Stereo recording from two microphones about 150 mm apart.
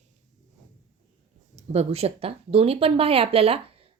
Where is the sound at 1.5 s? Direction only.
45° right (ahead or behind).